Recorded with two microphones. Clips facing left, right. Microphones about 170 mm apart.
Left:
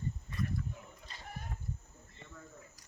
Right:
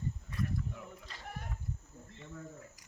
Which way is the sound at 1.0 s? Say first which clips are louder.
Right 2 dB; 85° right.